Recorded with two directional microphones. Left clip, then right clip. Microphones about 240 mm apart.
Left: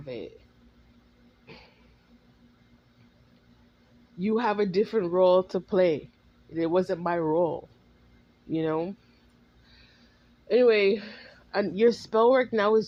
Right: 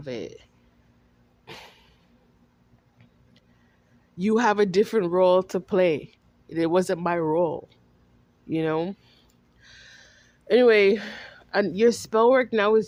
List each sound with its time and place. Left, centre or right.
0.0 s speech: right
1.5 s a sound: right
4.2 s speech: right
10.5 s speech: right